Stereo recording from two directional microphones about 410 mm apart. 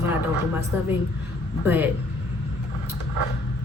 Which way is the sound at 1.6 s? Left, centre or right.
Centre.